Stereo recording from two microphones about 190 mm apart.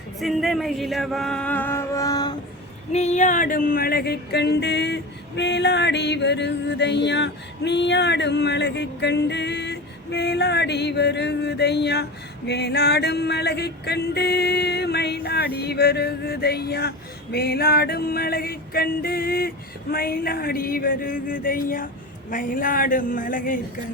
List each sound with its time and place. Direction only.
0.2 s music: centre (ahead or behind); by 2.3 s 20° left (ahead or behind)
2.9 s male singing: 35° left (ahead or behind); by 4.9 s 65° left (ahead or behind)
5.4 s music: 65° left (ahead or behind)
17.3 s male singing: 55° left (ahead or behind)